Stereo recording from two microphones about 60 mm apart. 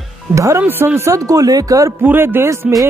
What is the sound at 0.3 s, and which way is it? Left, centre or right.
Speech, right.